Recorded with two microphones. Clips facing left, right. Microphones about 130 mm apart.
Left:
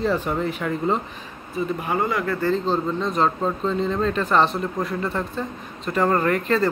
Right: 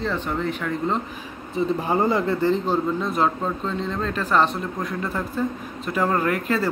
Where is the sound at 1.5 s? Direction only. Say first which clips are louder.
Right 2 dB; 30° right (ahead or behind).